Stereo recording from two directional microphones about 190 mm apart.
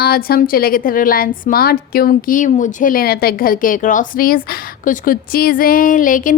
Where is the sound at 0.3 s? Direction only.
50° left (ahead or behind).